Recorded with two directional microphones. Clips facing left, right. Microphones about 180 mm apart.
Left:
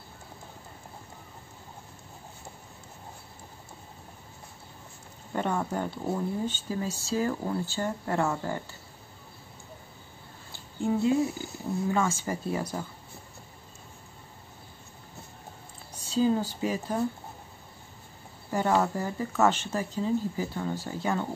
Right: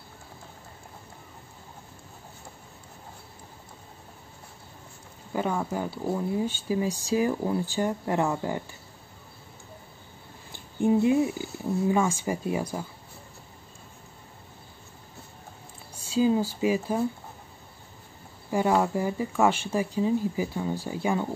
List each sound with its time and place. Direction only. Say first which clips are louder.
5.3 s speech: right 1 dB; 5° right (ahead or behind)
10.5 s a sound: right 5 dB; 15° right (ahead or behind)
11.9 s speech: right 2 dB; 15° right (ahead or behind)
15.9 s speech: right 2 dB; 10° right (ahead or behind)
18.5 s speech: right 2 dB; 10° right (ahead or behind)